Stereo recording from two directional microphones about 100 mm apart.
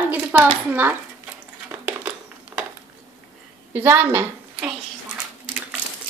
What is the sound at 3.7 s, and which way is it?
Speech, 20° right (ahead or behind).